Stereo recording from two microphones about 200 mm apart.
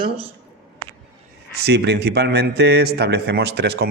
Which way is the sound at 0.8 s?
40° right (ahead or behind).